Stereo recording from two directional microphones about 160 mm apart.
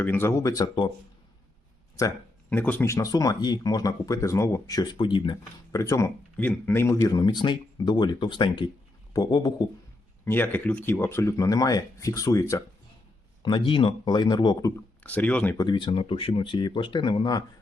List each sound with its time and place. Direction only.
0.0 s speech: 15° left (ahead or behind)
2.0 s speech: 20° left (ahead or behind)
10.2 s speech: 15° left (ahead or behind)
13.4 s speech: 30° left (ahead or behind)
15.0 s speech: 10° left (ahead or behind)
15.5 s speech: 25° left (ahead or behind)